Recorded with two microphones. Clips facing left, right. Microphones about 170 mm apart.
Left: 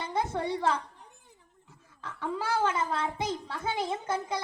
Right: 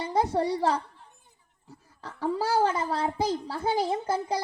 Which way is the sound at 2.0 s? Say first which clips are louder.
Right 4 dB; 35° right (ahead or behind).